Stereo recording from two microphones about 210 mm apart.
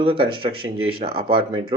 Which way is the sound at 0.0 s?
25° right (ahead or behind).